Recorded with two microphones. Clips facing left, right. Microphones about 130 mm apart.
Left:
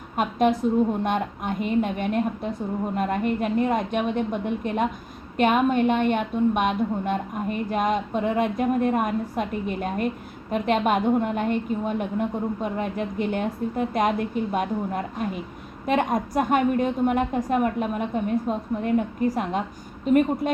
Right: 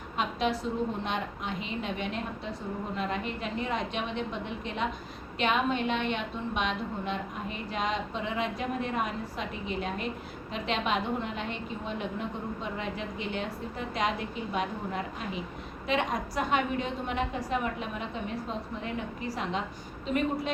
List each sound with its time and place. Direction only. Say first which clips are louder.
0.2 s a woman's voice: left 8 dB; 50° left (ahead or behind)